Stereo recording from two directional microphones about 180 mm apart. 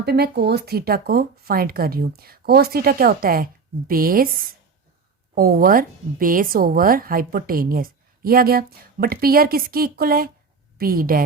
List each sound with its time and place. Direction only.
0.0 s a woman's voice: 65° right (ahead or behind)